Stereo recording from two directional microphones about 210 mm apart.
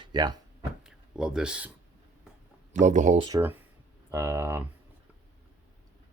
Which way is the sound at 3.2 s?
15° right (ahead or behind).